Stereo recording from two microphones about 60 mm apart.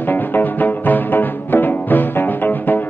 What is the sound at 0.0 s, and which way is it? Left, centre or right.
Music, left.